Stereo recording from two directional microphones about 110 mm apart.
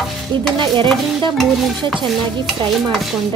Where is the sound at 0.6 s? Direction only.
45° right (ahead or behind).